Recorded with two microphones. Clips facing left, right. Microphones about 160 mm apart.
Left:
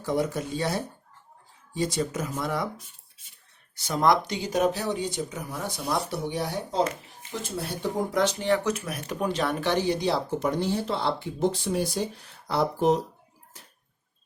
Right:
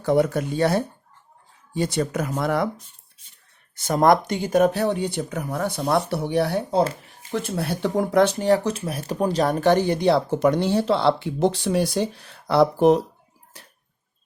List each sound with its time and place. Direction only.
0.0 s speech: 60° right (ahead or behind)
3.8 s speech: 50° right (ahead or behind); by 13.0 s 70° right (ahead or behind)